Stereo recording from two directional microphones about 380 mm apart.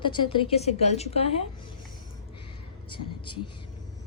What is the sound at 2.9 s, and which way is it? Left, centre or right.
Speech, centre.